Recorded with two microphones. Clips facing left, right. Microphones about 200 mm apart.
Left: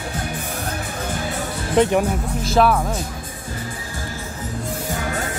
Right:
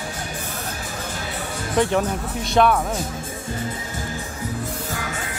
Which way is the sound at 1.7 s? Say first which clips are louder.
Left 3 dB; 20° left (ahead or behind).